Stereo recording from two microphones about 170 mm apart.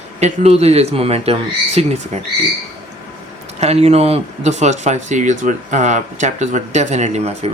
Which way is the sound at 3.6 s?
40° right (ahead or behind).